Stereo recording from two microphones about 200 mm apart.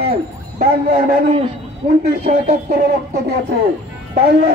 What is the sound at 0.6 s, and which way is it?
Speech, 45° right (ahead or behind).